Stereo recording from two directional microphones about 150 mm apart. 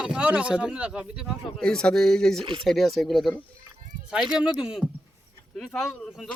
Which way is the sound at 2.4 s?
35° right (ahead or behind).